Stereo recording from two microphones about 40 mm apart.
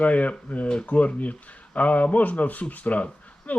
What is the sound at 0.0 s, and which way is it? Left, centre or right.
Speech, left.